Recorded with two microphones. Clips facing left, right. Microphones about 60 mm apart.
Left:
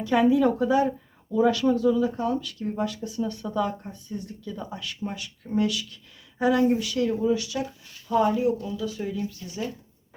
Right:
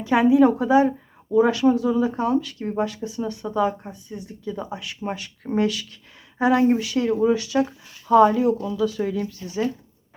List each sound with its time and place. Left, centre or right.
0.0 s a woman's voice: right
1.9 s speech: right
5.0 s speech: right
7.1 s speech: right
7.3 s speech: right
8.0 s speech: right